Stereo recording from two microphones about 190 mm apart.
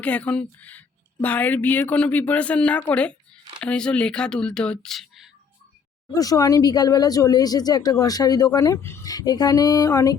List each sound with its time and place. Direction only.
0.0 s speech: 5° left (ahead or behind)
6.1 s speech: 20° left (ahead or behind)